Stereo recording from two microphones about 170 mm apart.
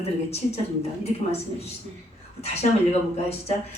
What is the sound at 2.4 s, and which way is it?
Speech, 40° left (ahead or behind).